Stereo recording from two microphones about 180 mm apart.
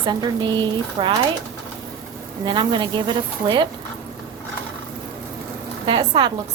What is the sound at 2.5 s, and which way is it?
A woman's voice, 25° right (ahead or behind).